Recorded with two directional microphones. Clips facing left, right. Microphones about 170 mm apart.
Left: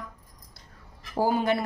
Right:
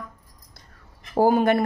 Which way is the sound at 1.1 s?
55° right (ahead or behind).